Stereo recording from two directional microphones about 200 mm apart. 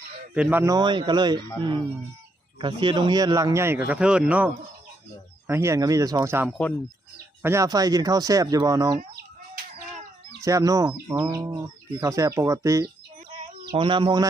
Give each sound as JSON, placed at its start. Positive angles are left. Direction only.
{"t": 0.3, "sound": "speech", "side_deg": -10}
{"t": 2.6, "sound": "a man's voice", "side_deg": -25}
{"t": 10.4, "sound": "a man's voice", "side_deg": -15}